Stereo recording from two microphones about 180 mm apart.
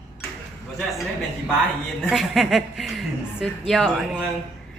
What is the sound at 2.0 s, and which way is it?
A woman's voice, centre (ahead or behind).